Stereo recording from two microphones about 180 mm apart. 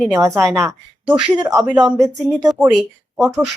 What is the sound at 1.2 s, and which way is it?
Speech, 25° right (ahead or behind).